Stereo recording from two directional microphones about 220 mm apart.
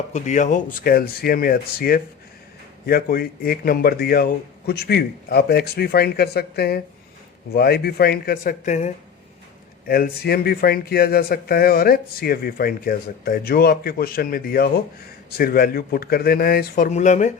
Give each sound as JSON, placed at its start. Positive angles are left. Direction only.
{"t": 0.1, "sound": "speech", "side_deg": 35}
{"t": 9.8, "sound": "speech", "side_deg": 45}